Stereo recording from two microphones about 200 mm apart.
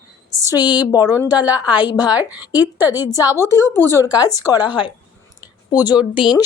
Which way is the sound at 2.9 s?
20° left (ahead or behind).